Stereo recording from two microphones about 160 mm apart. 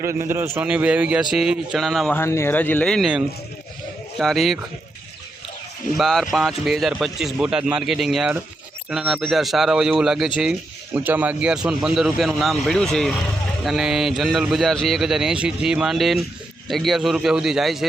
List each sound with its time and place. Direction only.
0.0 s a man's voice: 15° right (ahead or behind); by 2.1 s centre (ahead or behind)
2.1 s speech: 15° left (ahead or behind); by 4.6 s centre (ahead or behind)
6.0 s speech: centre (ahead or behind)